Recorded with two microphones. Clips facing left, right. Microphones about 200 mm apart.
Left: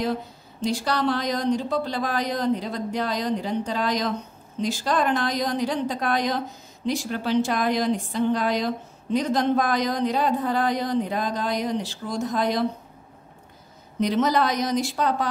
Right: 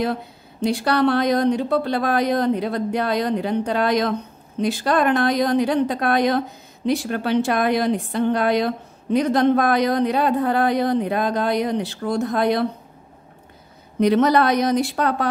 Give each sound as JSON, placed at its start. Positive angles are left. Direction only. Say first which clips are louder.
{"t": 0.0, "sound": "a woman's voice", "louder": "right 3 dB", "side_deg": -60}
{"t": 13.9, "sound": "a woman's voice", "louder": "right 5 dB", "side_deg": -60}